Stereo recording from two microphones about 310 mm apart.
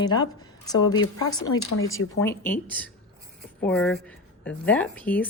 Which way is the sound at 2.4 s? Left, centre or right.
Centre.